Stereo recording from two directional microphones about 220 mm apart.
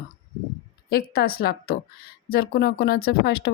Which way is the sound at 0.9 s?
45° left (ahead or behind).